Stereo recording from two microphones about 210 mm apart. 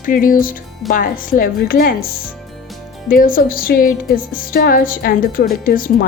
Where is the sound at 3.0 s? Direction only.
40° left (ahead or behind).